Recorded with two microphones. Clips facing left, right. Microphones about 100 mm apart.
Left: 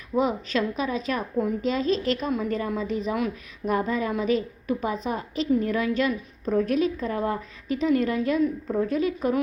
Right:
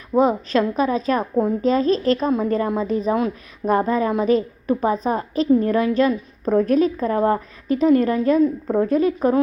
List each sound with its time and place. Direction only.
0.1 s a woman's voice: 40° right (ahead or behind)